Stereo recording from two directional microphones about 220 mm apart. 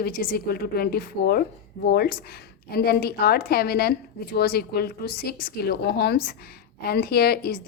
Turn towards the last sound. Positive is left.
turn(degrees=45)  # may be behind; listen again after turning